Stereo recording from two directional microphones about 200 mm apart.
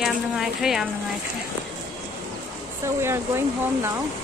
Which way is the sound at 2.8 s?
10° right (ahead or behind).